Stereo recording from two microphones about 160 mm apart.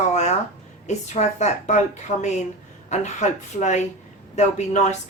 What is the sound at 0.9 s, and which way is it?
Speech, 45° left (ahead or behind).